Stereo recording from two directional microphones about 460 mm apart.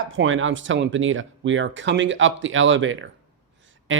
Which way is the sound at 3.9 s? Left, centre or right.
Right.